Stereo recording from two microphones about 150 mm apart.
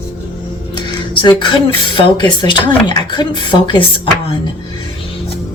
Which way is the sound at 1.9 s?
30° left (ahead or behind).